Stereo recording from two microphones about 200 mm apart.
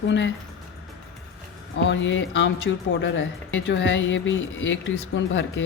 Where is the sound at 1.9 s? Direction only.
70° left (ahead or behind).